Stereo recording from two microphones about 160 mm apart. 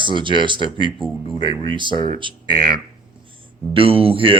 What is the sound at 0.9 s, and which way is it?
Speech, centre (ahead or behind).